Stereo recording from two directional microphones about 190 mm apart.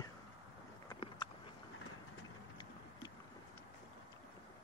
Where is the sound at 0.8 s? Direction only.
25° left (ahead or behind).